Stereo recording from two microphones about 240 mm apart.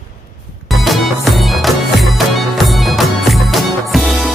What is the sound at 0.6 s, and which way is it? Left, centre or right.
Music, centre.